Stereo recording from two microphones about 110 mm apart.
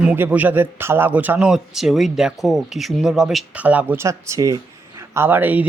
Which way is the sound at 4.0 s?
25° right (ahead or behind).